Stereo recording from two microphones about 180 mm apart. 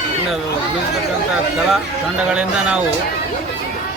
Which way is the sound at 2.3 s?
5° right (ahead or behind).